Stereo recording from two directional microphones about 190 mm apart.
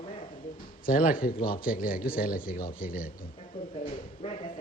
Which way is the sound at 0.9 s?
50° left (ahead or behind).